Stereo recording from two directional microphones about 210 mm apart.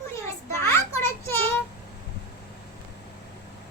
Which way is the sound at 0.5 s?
10° left (ahead or behind).